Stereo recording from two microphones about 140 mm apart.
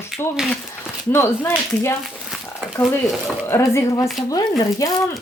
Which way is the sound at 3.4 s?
20° left (ahead or behind).